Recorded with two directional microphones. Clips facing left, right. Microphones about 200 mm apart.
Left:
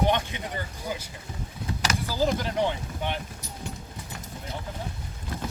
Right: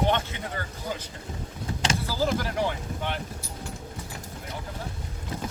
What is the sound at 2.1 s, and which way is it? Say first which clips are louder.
A man's voice: left 3 dB; 15° left (ahead or behind).